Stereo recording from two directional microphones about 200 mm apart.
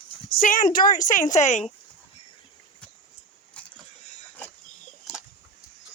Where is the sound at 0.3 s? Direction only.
45° left (ahead or behind).